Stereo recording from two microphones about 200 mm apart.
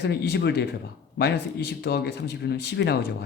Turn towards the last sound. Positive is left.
turn(degrees=55)  # may be behind; listen again after turning